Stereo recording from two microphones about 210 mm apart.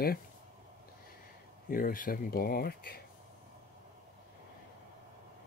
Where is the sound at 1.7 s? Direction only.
45° left (ahead or behind).